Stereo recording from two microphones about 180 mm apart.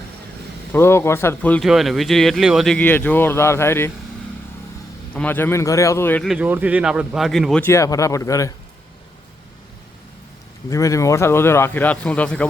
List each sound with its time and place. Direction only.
0.7 s speech: 15° left (ahead or behind)
5.1 s speech: 10° left (ahead or behind)
6.2 s speech: 5° right (ahead or behind)
7.6 s speech: 15° left (ahead or behind)
10.7 s speech: 15° left (ahead or behind)